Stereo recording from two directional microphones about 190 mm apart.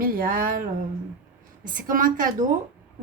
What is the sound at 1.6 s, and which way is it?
Speech, 45° right (ahead or behind).